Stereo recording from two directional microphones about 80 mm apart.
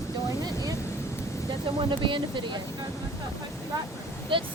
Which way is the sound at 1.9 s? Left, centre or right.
Right.